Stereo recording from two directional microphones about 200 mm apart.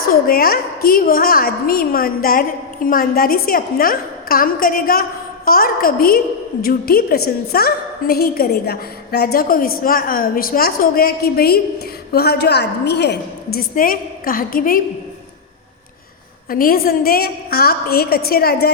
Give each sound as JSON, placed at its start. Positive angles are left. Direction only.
{"t": 0.1, "sound": "a woman's voice", "side_deg": 45}
{"t": 16.5, "sound": "a woman's voice", "side_deg": 45}